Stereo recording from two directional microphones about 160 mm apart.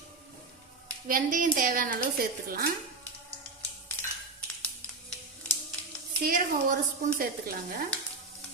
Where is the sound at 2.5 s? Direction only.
70° right (ahead or behind).